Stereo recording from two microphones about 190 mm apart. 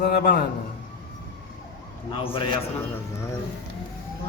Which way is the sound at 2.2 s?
25° left (ahead or behind).